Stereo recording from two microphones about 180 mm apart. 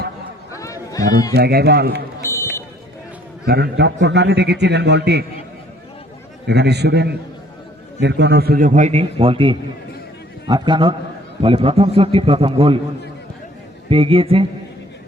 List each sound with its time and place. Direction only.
0.5 s run: 20° left (ahead or behind)
1.3 s speech: 65° right (ahead or behind)
2.2 s a sound: 15° left (ahead or behind)
3.4 s a man's voice: 65° right (ahead or behind)
6.5 s a man's voice: 70° right (ahead or behind); by 12.8 s 30° right (ahead or behind)
13.9 s a man's voice: 30° right (ahead or behind)